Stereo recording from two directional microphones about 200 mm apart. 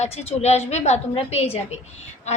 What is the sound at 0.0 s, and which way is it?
A woman's voice, 35° left (ahead or behind).